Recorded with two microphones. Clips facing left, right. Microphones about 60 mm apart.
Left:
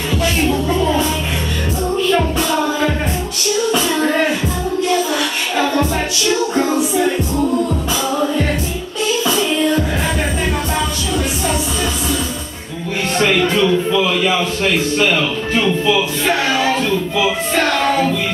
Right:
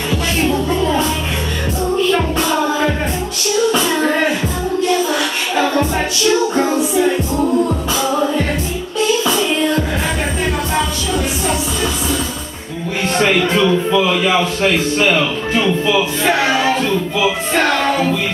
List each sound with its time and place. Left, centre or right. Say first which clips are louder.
0.5 s music: even; centre
2.0 s music: even; centre
7.0 s music: right 1 dB; centre
9.2 s music: even; centre
13.2 s a sound: even; centre
16.4 s a sound: right 1 dB; right
17.2 s music: right 1 dB; centre